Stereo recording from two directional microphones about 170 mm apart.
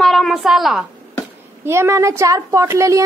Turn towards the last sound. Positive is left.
turn(degrees=-20)  # may be behind; listen again after turning